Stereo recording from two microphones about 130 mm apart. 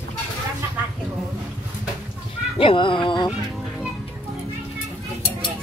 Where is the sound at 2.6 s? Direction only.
40° left (ahead or behind).